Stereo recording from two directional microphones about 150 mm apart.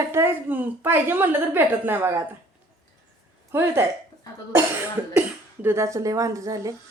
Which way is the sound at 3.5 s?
15° right (ahead or behind).